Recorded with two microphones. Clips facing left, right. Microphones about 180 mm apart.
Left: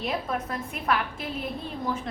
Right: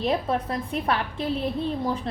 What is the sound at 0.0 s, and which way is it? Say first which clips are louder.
A woman's voice: right 5 dB; 35° right (ahead or behind).